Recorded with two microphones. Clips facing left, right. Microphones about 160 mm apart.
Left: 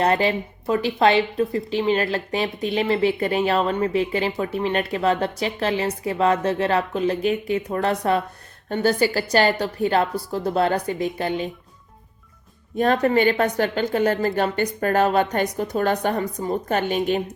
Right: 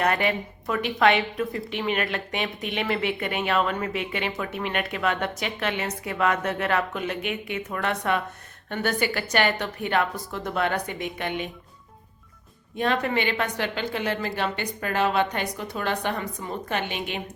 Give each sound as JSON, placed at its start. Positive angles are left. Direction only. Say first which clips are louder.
{"t": 0.0, "sound": "speech", "louder": "left 4 dB", "side_deg": 30}
{"t": 12.7, "sound": "a woman's voice", "louder": "left 6 dB", "side_deg": 40}